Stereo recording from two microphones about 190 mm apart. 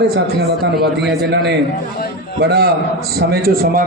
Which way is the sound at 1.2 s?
65° right (ahead or behind).